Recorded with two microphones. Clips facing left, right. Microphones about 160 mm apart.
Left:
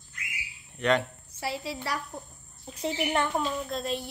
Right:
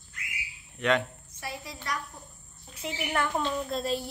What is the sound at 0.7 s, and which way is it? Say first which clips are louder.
Speech: left 1 dB; centre (ahead or behind).